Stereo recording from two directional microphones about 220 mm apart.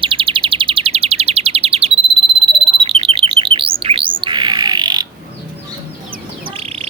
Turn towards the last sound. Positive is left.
turn(degrees=-25)  # may be behind; listen again after turning